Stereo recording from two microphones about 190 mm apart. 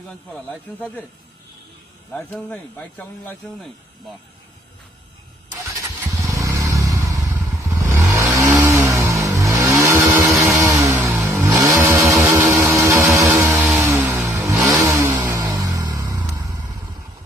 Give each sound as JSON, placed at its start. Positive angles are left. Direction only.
{"t": 0.1, "sound": "speech", "side_deg": 0}
{"t": 2.1, "sound": "speech", "side_deg": 5}
{"t": 6.1, "sound": "motorcycle", "side_deg": -15}
{"t": 8.4, "sound": "vehicle", "side_deg": -15}
{"t": 13.1, "sound": "vehicle", "side_deg": 0}